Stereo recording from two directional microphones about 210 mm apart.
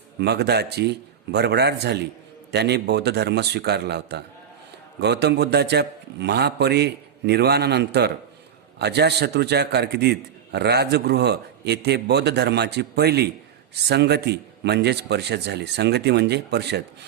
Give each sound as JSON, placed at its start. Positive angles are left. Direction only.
{"t": 0.2, "sound": "a man's voice", "side_deg": -50}